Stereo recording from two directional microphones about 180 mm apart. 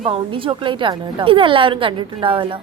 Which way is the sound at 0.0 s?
30° right (ahead or behind).